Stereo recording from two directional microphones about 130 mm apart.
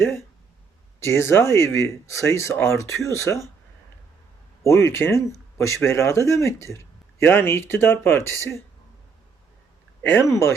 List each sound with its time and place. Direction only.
0.9 s speech: 20° left (ahead or behind)
4.6 s speech: 20° left (ahead or behind)
10.0 s speech: 15° left (ahead or behind)